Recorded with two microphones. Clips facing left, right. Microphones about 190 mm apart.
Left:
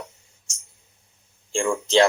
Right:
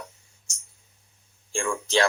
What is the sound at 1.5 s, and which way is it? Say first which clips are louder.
Speech: left 5 dB; 20° left (ahead or behind).